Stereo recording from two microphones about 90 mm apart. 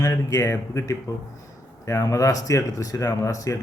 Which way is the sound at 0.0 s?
40° left (ahead or behind).